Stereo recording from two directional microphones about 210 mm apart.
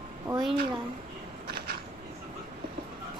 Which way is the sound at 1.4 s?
50° right (ahead or behind).